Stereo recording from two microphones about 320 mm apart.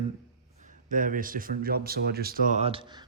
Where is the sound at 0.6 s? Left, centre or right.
Right.